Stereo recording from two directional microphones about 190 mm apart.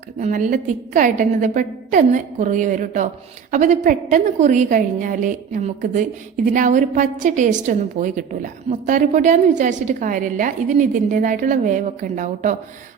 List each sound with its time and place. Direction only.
0.2 s a woman's voice: 40° right (ahead or behind)